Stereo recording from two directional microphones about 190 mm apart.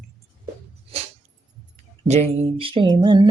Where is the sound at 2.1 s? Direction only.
35° right (ahead or behind).